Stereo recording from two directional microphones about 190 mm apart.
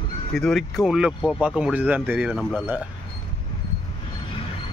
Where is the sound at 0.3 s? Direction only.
5° left (ahead or behind).